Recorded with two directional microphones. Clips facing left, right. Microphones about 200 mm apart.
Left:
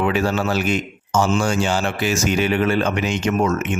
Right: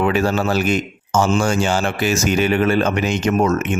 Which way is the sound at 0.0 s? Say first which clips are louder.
Right 2 dB; 40° right (ahead or behind).